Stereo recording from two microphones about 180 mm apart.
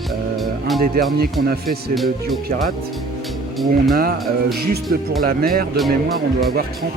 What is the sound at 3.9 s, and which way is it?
Speech, 55° right (ahead or behind).